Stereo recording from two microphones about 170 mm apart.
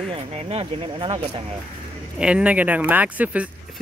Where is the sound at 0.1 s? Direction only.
35° right (ahead or behind).